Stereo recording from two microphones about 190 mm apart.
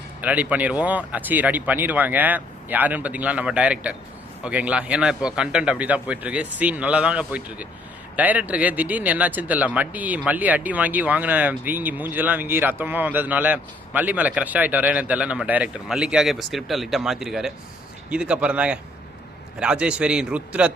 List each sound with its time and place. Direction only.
0.2 s a man's voice: 10° right (ahead or behind)